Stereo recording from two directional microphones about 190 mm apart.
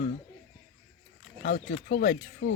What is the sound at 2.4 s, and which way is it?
Speech, 90° left.